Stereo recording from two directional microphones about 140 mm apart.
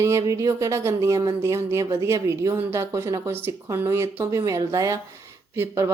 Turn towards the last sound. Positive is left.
turn(degrees=-15)  # may be behind; listen again after turning